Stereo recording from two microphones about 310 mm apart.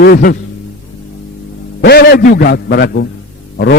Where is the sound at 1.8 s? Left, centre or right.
Left.